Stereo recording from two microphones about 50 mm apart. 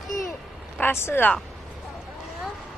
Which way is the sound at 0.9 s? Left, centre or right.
Left.